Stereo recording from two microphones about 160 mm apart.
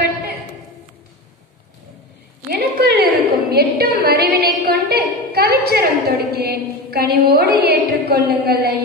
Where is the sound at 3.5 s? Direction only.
75° right (ahead or behind).